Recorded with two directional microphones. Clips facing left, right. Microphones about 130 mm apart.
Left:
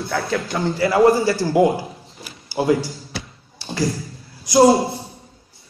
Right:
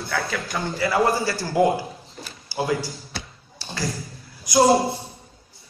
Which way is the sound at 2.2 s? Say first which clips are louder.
Left 6 dB; 20° left (ahead or behind).